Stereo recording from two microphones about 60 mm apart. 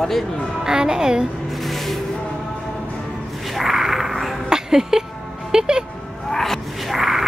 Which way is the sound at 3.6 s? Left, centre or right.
Centre.